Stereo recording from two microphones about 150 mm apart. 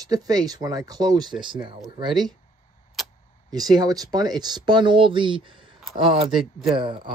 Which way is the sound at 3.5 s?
25° right (ahead or behind).